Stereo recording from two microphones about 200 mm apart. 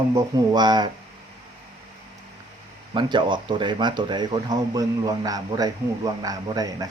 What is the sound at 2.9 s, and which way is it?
Speech, 25° right (ahead or behind).